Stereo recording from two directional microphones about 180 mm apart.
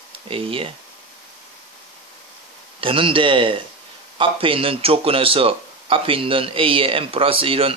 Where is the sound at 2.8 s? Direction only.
30° right (ahead or behind).